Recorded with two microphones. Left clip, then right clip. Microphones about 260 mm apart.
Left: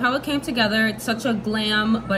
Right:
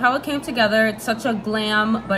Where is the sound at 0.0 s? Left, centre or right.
Centre.